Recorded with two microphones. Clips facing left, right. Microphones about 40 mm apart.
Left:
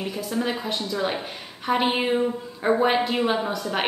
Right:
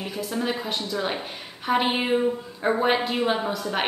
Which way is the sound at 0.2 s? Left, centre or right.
Centre.